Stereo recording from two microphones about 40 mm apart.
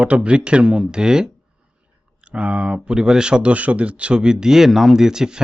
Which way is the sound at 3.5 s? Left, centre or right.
Right.